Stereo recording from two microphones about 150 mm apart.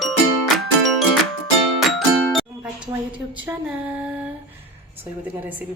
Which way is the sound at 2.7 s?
35° right (ahead or behind).